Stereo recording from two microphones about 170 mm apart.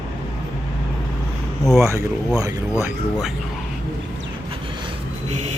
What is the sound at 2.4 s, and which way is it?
Speech, 15° right (ahead or behind).